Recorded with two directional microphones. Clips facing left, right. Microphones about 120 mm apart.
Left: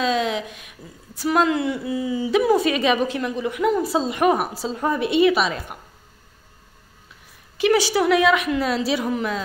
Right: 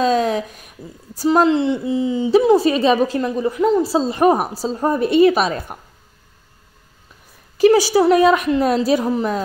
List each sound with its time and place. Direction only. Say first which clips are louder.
0.0 s a woman's voice: right 5 dB; 40° right (ahead or behind)
7.5 s a woman's voice: right 6 dB; 40° right (ahead or behind)